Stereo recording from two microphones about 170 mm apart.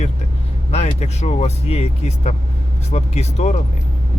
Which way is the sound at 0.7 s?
40° left (ahead or behind).